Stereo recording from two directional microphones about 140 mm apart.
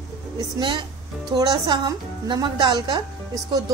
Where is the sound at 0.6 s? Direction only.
35° right (ahead or behind).